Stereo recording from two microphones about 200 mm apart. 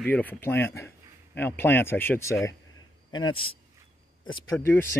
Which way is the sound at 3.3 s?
25° left (ahead or behind).